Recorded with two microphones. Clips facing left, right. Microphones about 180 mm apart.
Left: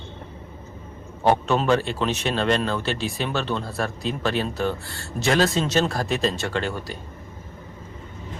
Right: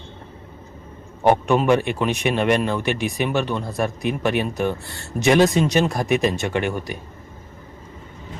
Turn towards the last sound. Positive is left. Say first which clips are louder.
# right 4 dB
turn(degrees=-15)  # may be behind; listen again after turning